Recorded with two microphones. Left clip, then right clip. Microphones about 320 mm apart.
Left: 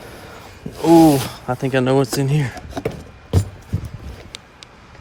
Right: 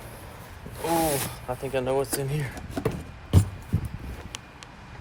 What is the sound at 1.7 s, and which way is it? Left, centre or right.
Speech, left.